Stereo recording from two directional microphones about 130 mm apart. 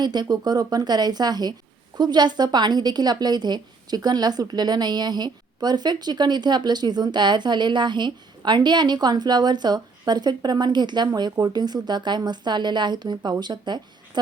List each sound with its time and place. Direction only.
0.0 s a woman's voice: 35° right (ahead or behind)